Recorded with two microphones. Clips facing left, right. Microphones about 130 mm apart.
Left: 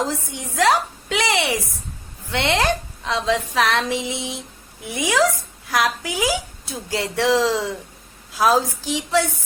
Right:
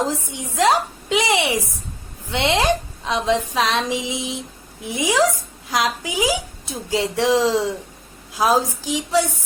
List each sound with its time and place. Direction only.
0.0 s a woman's voice: 15° right (ahead or behind)